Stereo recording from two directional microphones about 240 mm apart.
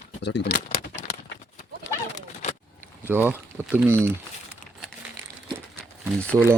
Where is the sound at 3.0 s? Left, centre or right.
Centre.